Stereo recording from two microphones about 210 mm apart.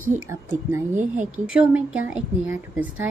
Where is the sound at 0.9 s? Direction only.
35° right (ahead or behind).